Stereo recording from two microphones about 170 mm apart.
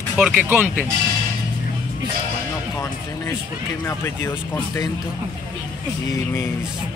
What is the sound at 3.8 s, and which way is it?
Speech, 15° left (ahead or behind).